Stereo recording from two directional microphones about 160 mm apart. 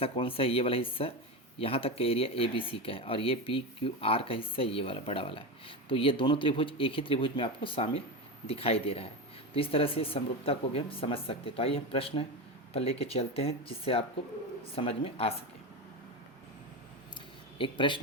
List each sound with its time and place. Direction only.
0.0 s speech: 35° left (ahead or behind)
17.6 s speech: 30° left (ahead or behind)